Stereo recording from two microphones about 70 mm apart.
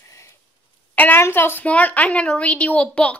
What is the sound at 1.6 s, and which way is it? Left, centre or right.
A woman's voice, left.